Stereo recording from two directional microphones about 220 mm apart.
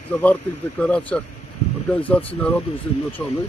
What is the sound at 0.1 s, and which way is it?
Speech, 5° left (ahead or behind).